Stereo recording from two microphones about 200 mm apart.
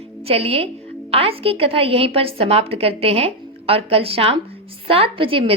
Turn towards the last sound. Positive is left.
turn(degrees=-25)  # may be behind; listen again after turning